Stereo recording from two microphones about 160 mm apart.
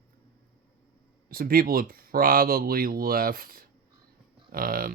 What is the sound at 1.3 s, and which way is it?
Speech, 65° right (ahead or behind).